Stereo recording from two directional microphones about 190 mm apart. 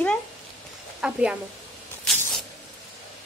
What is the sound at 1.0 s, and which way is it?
Speech, 5° right (ahead or behind).